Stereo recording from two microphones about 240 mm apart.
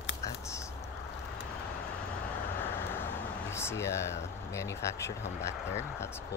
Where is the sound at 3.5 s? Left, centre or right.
Centre.